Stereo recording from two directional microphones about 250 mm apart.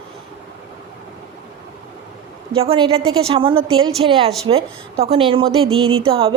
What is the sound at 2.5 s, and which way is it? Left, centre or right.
A woman's voice, right.